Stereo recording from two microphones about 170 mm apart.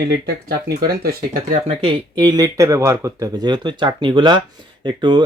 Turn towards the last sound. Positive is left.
turn(degrees=-25)  # may be behind; listen again after turning